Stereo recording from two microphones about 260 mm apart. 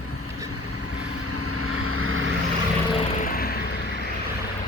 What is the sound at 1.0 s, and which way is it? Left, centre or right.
Vehicle, right.